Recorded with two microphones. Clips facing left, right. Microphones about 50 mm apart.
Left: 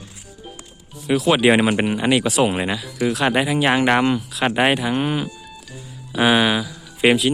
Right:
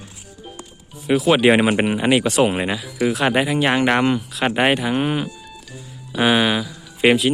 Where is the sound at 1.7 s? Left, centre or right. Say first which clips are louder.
Right 1 dB; centre.